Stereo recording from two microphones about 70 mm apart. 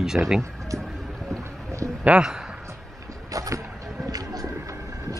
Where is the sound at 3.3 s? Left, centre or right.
Right.